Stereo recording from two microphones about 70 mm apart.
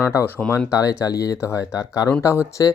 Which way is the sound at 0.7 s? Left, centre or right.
Left.